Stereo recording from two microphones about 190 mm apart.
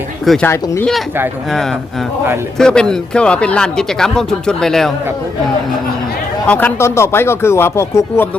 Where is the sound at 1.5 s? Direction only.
Centre (ahead or behind).